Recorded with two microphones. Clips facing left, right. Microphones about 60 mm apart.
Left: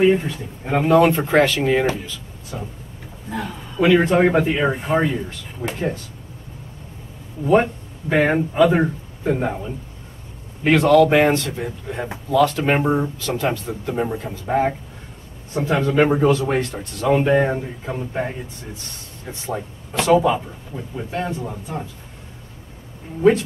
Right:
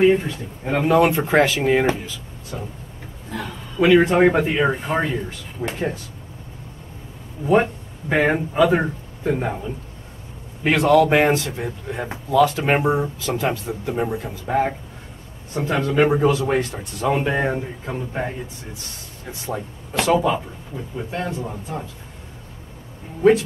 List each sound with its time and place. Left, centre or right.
0.0 s speech: centre
3.3 s a man's voice: centre
4.3 s speech: centre
7.5 s speech: centre
10.6 s speech: centre